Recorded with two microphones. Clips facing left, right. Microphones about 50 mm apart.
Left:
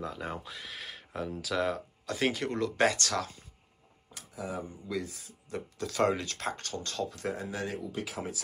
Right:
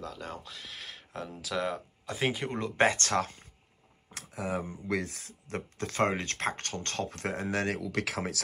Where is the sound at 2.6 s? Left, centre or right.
Right.